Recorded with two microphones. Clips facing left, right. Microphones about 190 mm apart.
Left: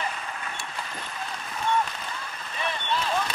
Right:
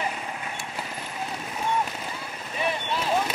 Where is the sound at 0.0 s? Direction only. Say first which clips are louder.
Right 2 dB; 10° right (ahead or behind).